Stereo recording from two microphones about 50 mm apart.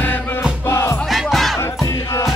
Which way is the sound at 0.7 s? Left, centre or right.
Left.